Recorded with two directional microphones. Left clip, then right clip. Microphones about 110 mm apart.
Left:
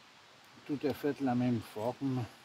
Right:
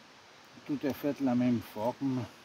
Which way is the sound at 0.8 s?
40° right (ahead or behind).